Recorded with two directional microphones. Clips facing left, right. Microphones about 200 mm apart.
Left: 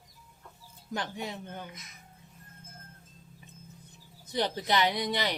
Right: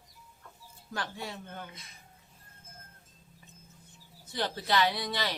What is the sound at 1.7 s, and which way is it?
Speech, 30° right (ahead or behind).